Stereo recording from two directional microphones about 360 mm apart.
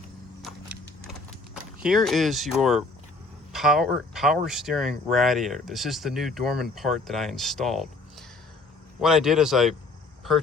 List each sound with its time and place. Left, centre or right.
1.8 s speech: centre